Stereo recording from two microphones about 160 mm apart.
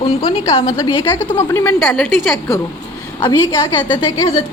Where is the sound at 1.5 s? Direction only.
15° left (ahead or behind).